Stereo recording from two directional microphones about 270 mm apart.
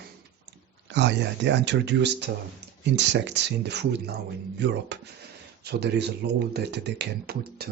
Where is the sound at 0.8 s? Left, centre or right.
Right.